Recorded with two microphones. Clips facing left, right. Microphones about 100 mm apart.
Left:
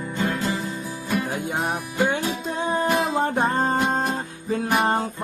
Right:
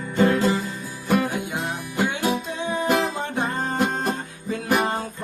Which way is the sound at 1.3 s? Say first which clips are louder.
Left 2 dB; 40° left (ahead or behind).